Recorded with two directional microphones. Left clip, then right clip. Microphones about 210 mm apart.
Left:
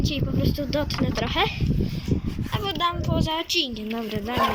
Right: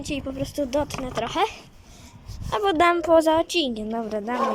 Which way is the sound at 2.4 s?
25° right (ahead or behind).